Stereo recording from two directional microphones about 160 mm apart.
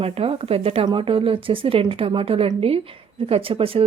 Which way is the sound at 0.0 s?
40° right (ahead or behind).